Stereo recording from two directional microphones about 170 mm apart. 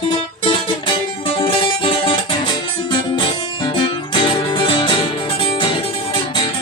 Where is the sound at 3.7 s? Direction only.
30° left (ahead or behind).